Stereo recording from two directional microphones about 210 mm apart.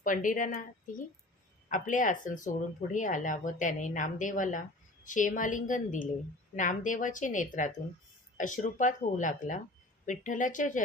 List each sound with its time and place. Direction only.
0.0 s speech: 40° left (ahead or behind)